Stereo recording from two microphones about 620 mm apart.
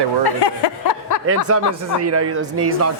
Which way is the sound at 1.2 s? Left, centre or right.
Right.